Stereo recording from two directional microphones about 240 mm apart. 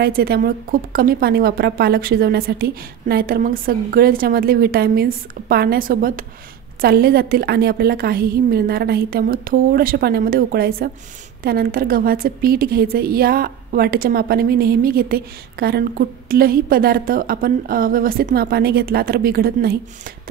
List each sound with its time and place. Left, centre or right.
0.0 s a woman's voice: right